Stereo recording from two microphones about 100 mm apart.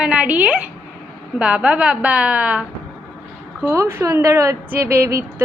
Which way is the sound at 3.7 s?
25° right (ahead or behind).